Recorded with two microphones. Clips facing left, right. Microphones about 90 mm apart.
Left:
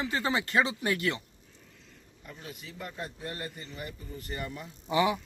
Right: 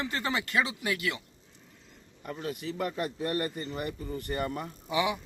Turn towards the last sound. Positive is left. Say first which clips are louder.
# left 2 dB
turn(degrees=35)  # may be behind; listen again after turning